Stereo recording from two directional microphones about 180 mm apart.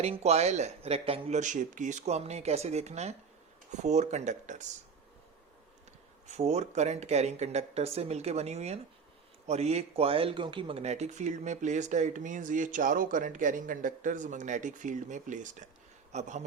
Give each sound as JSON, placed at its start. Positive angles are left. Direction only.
{"t": 0.0, "sound": "speech", "side_deg": -35}
{"t": 6.2, "sound": "speech", "side_deg": -40}